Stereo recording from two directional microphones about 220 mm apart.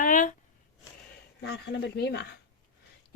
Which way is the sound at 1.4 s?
50° left (ahead or behind).